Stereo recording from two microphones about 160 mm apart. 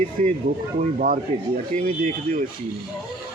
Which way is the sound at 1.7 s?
10° left (ahead or behind).